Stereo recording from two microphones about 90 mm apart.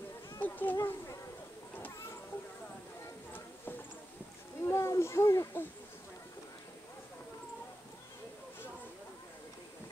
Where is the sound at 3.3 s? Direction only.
20° left (ahead or behind).